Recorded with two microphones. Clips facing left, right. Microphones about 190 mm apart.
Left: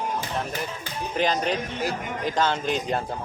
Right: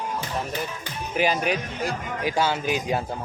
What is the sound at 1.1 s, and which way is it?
Speech, 10° right (ahead or behind).